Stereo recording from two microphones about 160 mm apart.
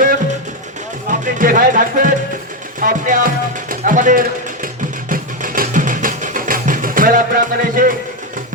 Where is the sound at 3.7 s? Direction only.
55° right (ahead or behind).